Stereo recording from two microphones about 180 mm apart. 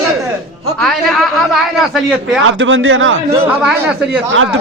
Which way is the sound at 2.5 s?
90° right.